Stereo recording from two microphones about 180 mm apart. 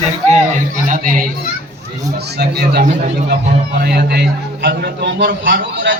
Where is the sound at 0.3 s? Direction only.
45° right (ahead or behind).